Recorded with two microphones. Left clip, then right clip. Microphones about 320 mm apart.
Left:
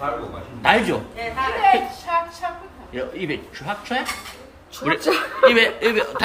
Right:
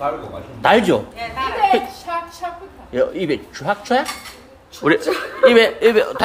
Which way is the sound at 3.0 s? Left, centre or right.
Centre.